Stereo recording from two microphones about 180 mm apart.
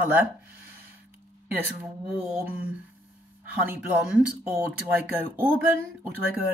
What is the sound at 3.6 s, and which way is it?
Speech, 5° right (ahead or behind).